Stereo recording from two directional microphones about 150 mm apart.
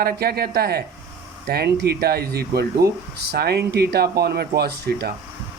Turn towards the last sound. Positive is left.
turn(degrees=-90)